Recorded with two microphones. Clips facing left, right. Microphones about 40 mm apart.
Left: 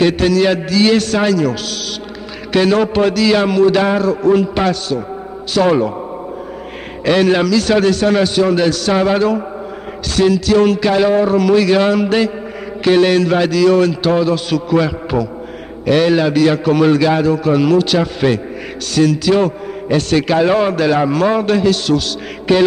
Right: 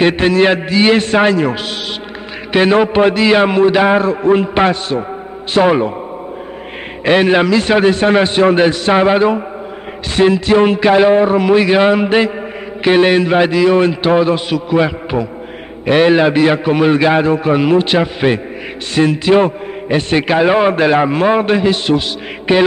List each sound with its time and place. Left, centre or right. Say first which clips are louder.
0.0 s a man's voice: right 2 dB; right
7.1 s a man's voice: right 2 dB; right